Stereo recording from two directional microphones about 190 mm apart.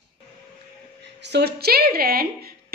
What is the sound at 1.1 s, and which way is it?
Speech, 65° right (ahead or behind).